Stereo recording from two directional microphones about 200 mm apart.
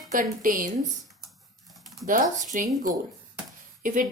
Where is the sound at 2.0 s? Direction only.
40° right (ahead or behind).